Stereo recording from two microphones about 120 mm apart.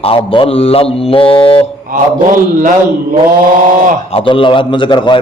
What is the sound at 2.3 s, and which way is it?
Speech, 90° right.